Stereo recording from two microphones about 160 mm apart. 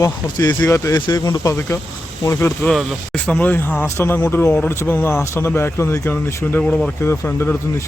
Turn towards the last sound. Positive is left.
turn(degrees=15)  # may be behind; listen again after turning